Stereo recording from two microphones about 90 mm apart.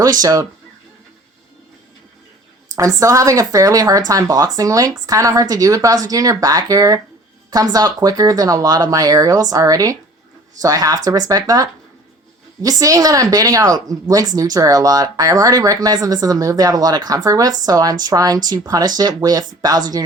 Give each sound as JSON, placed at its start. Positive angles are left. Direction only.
{"t": 0.0, "sound": "speech", "side_deg": -45}
{"t": 2.7, "sound": "speech", "side_deg": -40}